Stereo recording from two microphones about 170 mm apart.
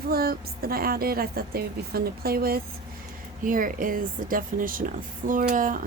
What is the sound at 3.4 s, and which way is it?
A woman's voice, 55° right (ahead or behind).